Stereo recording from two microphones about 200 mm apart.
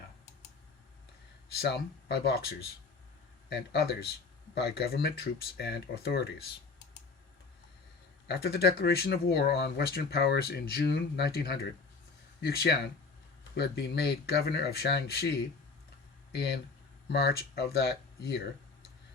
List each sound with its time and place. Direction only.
1.5 s speech: 55° left (ahead or behind)
8.3 s speech: 55° left (ahead or behind)
16.3 s speech: 55° left (ahead or behind)